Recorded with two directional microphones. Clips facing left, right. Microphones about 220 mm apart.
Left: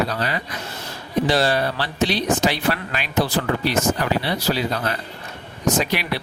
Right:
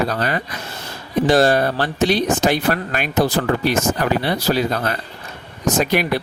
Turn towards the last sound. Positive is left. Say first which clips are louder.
# right 4 dB
turn(degrees=-50)  # may be behind; listen again after turning